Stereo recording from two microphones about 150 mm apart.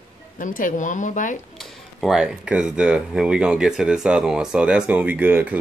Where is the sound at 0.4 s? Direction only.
65° left (ahead or behind).